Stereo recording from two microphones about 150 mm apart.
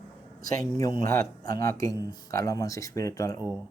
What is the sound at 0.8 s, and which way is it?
Speech, 25° left (ahead or behind).